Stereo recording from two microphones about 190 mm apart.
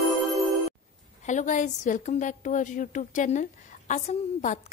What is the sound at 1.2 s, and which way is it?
A woman's voice, 40° left (ahead or behind).